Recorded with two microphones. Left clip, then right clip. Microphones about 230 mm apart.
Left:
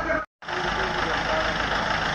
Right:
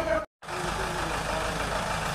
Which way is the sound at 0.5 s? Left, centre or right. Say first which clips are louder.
Left 5 dB; right.